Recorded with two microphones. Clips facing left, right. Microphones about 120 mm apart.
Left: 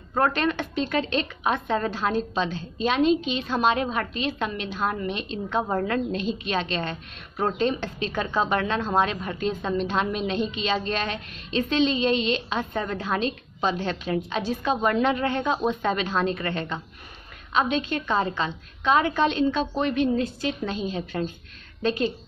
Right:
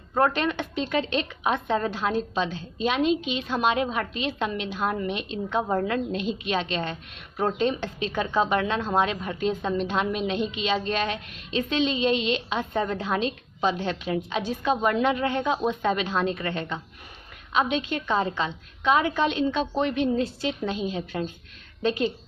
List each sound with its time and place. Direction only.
0.2 s a woman's voice: 15° right (ahead or behind)
20.6 s a woman's voice: 15° right (ahead or behind)